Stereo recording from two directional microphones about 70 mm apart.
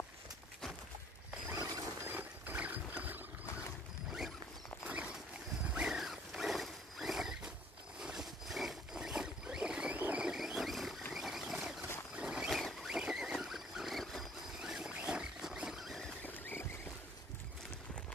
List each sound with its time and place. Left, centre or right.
1.6 s mechanisms: right
2.0 s a sound: right
5.7 s wild animals: centre
8.0 s boat: centre
9.9 s vehicle: right
10.2 s vehicle: centre
12.2 s rodents: centre
12.4 s boat: centre
14.6 s a sound: centre
16.2 s rodents: left